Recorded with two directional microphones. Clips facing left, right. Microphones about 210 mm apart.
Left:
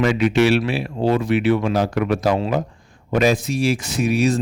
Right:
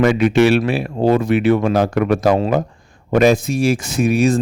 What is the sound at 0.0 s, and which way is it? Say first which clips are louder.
Speech: right 4 dB; 50° right (ahead or behind).